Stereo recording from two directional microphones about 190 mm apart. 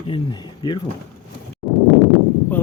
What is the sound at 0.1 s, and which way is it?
Speech, 25° left (ahead or behind).